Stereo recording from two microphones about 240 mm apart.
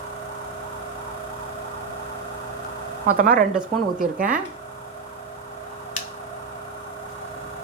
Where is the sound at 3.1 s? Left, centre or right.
Right.